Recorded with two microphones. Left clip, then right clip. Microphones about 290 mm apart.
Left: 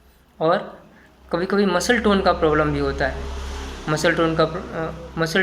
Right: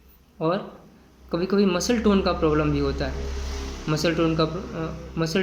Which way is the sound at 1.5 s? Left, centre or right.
Left.